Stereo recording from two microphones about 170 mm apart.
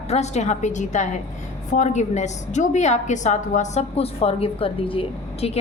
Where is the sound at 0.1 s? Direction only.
40° left (ahead or behind).